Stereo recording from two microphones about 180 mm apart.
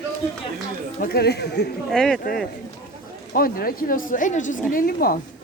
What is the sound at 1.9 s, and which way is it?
Speech, 5° left (ahead or behind).